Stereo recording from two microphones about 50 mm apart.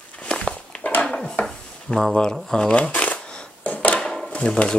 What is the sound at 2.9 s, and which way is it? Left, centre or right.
Shuffling cards, left.